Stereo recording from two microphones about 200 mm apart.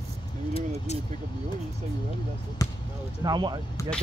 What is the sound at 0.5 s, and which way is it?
Vehicle, 30° left (ahead or behind).